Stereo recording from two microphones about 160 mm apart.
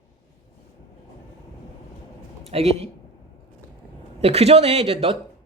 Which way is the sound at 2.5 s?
40° right (ahead or behind).